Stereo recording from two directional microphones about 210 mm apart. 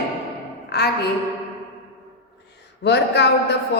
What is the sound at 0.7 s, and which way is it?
Speech, 50° left (ahead or behind).